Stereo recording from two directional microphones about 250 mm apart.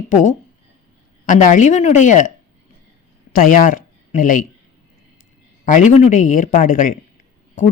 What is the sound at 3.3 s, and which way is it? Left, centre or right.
Speech, left.